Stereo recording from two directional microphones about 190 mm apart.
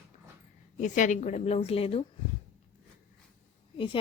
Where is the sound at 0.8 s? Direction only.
40° left (ahead or behind).